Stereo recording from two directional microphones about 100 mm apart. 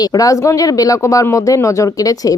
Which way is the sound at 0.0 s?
35° left (ahead or behind).